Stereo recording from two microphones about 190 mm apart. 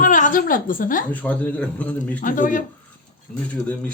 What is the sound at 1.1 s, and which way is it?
Speech, 10° left (ahead or behind).